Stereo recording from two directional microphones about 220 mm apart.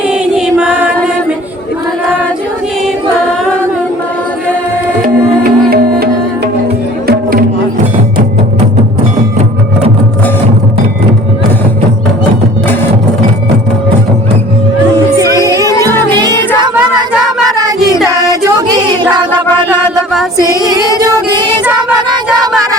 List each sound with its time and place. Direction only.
0.1 s choir: 5° right (ahead or behind)
5.0 s music: 45° right (ahead or behind)
7.1 s music: 40° right (ahead or behind)
15.2 s music: 15° right (ahead or behind)
18.1 s music: 15° right (ahead or behind)
21.0 s female singing: 15° right (ahead or behind)